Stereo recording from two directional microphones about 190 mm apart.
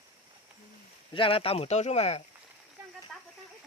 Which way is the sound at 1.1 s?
30° left (ahead or behind).